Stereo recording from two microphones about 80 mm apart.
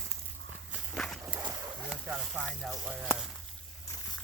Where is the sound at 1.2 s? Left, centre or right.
Centre.